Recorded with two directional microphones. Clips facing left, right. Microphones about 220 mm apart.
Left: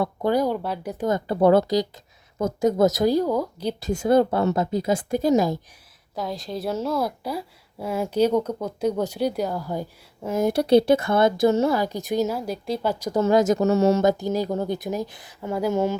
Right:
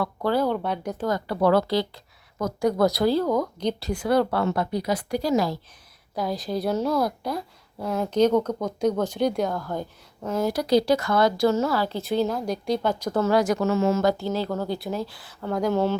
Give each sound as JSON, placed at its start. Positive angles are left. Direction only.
{"t": 0.0, "sound": "a woman's voice", "side_deg": 20}
{"t": 1.0, "sound": "a woman's voice", "side_deg": 25}
{"t": 4.0, "sound": "speech", "side_deg": 20}
{"t": 6.1, "sound": "a woman's voice", "side_deg": 0}
{"t": 10.4, "sound": "a woman's voice", "side_deg": 25}
{"t": 13.2, "sound": "speech", "side_deg": 25}
{"t": 13.6, "sound": "speech", "side_deg": 40}
{"t": 14.0, "sound": "a woman's voice", "side_deg": 20}